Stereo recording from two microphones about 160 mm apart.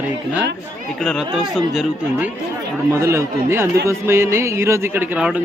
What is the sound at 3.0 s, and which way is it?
A man's voice, 15° right (ahead or behind).